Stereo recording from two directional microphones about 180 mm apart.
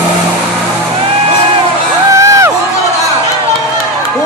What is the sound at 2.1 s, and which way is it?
Crowd, 15° right (ahead or behind).